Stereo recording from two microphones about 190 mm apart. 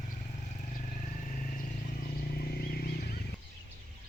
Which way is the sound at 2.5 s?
55° left (ahead or behind).